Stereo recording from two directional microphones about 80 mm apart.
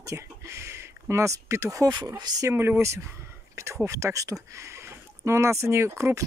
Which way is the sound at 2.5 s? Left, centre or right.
Right.